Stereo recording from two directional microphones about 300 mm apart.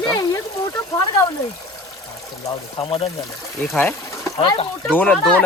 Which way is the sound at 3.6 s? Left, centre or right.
Centre.